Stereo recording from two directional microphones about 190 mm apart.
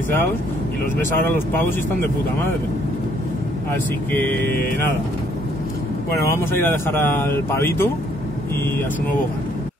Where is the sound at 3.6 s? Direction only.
10° left (ahead or behind).